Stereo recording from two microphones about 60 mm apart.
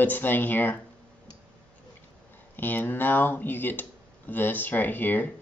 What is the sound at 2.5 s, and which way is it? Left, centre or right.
Speech, left.